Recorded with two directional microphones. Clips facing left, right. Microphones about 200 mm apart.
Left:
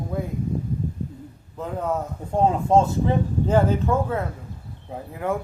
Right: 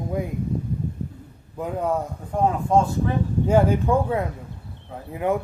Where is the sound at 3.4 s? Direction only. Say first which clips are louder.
Right 2 dB; 10° right (ahead or behind).